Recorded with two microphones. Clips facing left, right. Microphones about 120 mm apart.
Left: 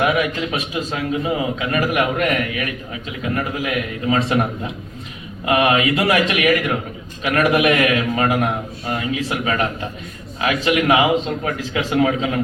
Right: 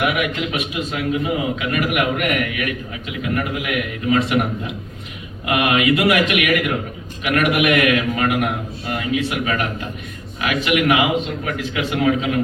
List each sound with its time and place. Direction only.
0.0 s a man's voice: 30° left (ahead or behind)